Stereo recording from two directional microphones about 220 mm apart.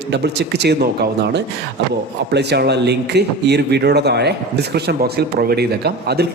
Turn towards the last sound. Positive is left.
turn(degrees=-45)  # may be behind; listen again after turning